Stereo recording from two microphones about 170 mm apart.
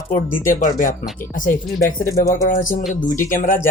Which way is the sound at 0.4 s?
50° left (ahead or behind).